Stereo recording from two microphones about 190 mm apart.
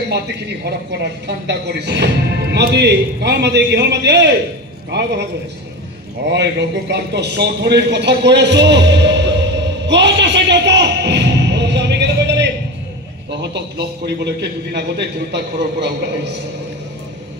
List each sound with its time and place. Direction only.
1.2 s speech: 60° right (ahead or behind)
6.3 s a sound: 60° right (ahead or behind)
13.4 s speech: 60° right (ahead or behind)